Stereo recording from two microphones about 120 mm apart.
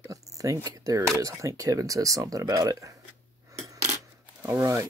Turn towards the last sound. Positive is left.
turn(degrees=-25)  # may be behind; listen again after turning